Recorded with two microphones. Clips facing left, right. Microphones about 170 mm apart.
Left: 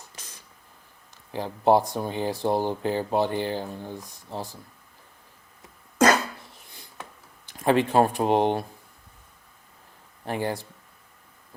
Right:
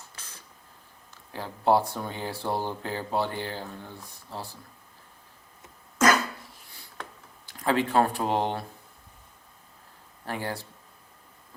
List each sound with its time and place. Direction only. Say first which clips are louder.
1.3 s speech: left 3 dB; 15° left (ahead or behind)
7.4 s speech: left 4 dB; 20° left (ahead or behind)
10.2 s speech: left 5 dB; 20° left (ahead or behind)